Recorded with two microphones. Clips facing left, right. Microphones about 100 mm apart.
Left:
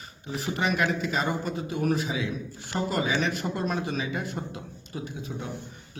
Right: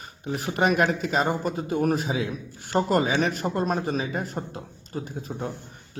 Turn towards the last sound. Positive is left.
turn(degrees=-40)  # may be behind; listen again after turning